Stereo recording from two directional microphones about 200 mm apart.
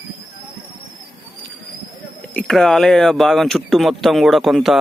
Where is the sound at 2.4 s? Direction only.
Centre (ahead or behind).